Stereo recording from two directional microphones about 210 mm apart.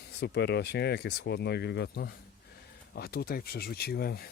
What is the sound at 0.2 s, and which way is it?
Speech, 55° left (ahead or behind).